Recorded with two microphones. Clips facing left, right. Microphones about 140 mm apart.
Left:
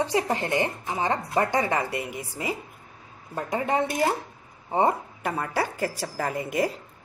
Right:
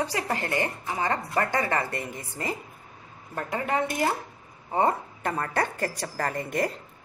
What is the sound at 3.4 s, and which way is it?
A woman's voice, 20° left (ahead or behind).